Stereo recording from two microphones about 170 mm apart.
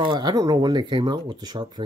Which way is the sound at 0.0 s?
25° right (ahead or behind).